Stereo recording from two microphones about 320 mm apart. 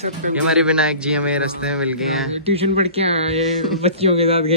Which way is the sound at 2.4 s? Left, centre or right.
Centre.